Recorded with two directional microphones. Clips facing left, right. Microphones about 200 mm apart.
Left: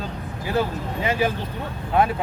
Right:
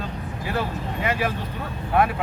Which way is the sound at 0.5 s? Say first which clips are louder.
Left 4 dB; 25° left (ahead or behind).